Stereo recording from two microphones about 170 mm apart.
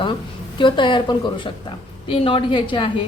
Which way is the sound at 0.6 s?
30° left (ahead or behind).